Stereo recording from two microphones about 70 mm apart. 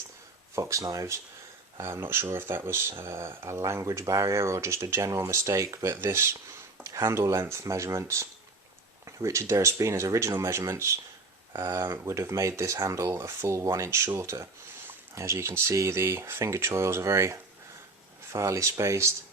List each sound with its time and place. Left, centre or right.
0.5 s speech: right
1.8 s speech: right
3.6 s speech: right
6.8 s speech: right
15.1 s speech: right